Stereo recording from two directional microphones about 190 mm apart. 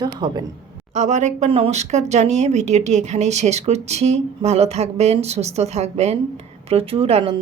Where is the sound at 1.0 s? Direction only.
35° right (ahead or behind).